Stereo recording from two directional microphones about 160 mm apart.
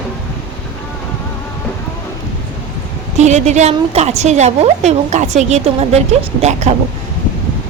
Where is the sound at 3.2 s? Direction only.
45° right (ahead or behind).